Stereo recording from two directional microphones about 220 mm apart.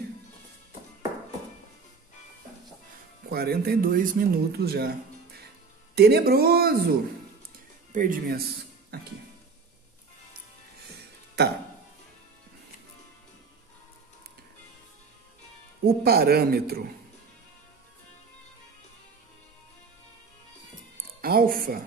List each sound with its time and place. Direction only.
3.3 s speech: 45° right (ahead or behind)
11.4 s speech: 50° right (ahead or behind)
15.8 s speech: 45° right (ahead or behind)
21.2 s music: 45° right (ahead or behind)